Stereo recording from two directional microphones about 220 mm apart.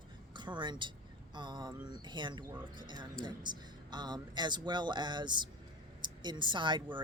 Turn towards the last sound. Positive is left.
turn(degrees=-20)  # may be behind; listen again after turning